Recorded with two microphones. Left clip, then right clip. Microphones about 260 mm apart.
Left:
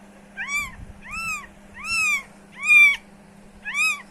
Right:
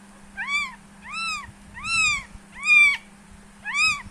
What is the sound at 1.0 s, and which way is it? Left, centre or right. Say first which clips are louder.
Cat: even; centre.